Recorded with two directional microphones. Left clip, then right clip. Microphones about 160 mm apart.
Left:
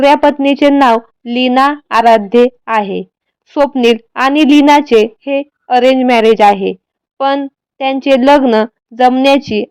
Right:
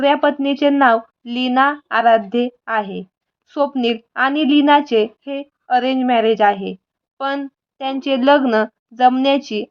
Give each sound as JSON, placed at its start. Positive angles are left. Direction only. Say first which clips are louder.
{"t": 0.0, "sound": "a woman's voice", "louder": "left 7 dB", "side_deg": 25}